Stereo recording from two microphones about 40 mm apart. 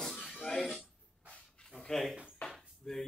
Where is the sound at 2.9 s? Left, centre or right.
Centre.